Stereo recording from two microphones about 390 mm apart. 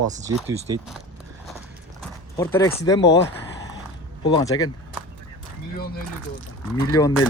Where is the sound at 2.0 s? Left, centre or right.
Centre.